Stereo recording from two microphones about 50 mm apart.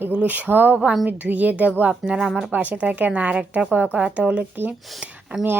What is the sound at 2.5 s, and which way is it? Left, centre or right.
Speech, right.